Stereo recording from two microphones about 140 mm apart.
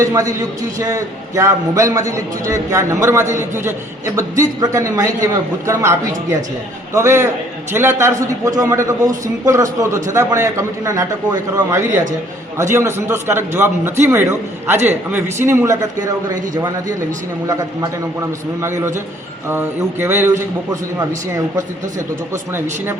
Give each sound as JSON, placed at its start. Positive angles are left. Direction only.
{"t": 0.0, "sound": "a man's voice", "side_deg": -25}